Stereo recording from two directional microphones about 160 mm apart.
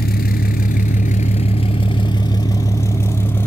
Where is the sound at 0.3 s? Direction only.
55° left (ahead or behind).